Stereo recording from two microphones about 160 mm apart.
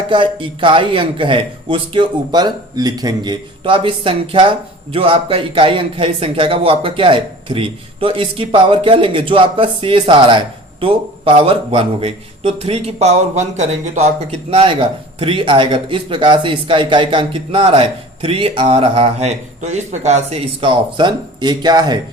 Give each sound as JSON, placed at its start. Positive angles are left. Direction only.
{"t": 0.1, "sound": "a man's voice", "side_deg": -30}
{"t": 20.6, "sound": "speech", "side_deg": -30}